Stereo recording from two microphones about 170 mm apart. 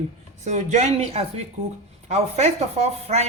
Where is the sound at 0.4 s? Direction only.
45° right (ahead or behind).